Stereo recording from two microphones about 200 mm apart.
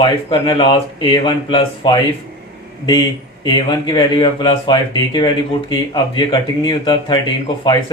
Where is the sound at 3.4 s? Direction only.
20° left (ahead or behind).